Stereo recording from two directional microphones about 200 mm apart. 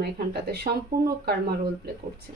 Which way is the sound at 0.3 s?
55° right (ahead or behind).